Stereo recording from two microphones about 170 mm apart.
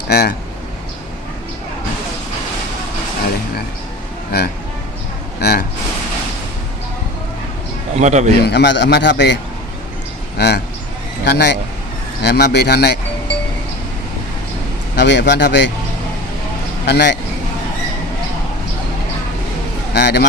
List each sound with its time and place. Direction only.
0.1 s a man's voice: 65° left (ahead or behind)
4.3 s speech: 65° left (ahead or behind)
7.9 s speech: 45° right (ahead or behind)
8.4 s a man's voice: 85° left
10.3 s speech: 75° left (ahead or behind)
14.9 s a man's voice: 90° left
16.8 s speech: 85° left
19.9 s a sound: 80° left